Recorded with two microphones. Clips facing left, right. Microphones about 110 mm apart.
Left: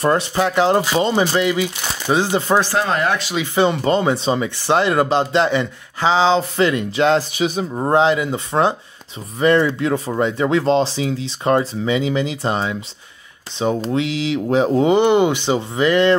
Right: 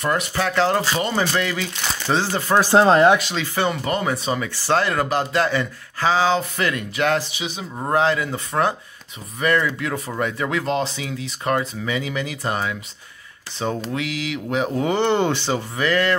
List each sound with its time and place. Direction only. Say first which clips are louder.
0.0 s speech: left 5 dB; 30° left (ahead or behind)
2.7 s speech: right 5 dB; 25° right (ahead or behind)
3.2 s speech: left 3 dB; 5° left (ahead or behind)
3.5 s speech: left 7 dB; 25° left (ahead or behind)
7.2 s speech: left 8 dB; 45° left (ahead or behind)
7.7 s speech: left 3 dB; 25° left (ahead or behind)
13.7 s speech: left 6 dB; 25° left (ahead or behind)